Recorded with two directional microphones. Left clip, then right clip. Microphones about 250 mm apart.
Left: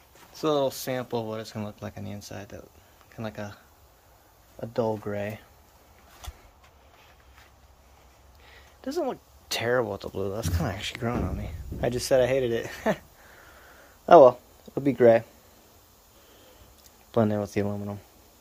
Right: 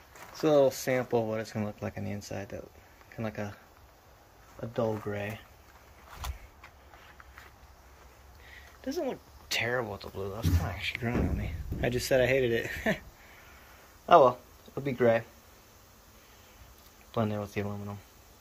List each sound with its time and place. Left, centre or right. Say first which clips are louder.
0.3 s speech: right 1 dB; centre
4.6 s speech: left 4 dB; left
8.9 s speech: left 5 dB; left
11.0 s speech: left 3 dB; centre
14.0 s speech: left 6 dB; left
17.1 s speech: left 7 dB; left